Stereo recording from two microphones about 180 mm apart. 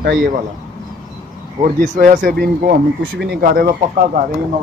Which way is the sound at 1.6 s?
45° right (ahead or behind).